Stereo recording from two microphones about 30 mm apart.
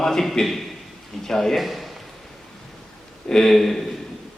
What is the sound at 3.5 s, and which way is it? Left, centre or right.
Speech, centre.